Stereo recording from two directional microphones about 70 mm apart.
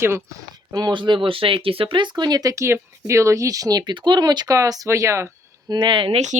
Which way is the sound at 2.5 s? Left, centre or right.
Right.